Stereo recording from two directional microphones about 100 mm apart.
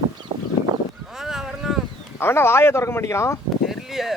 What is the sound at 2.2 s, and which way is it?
Speech, 25° left (ahead or behind).